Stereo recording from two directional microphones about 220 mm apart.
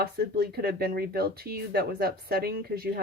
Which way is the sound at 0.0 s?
45° right (ahead or behind).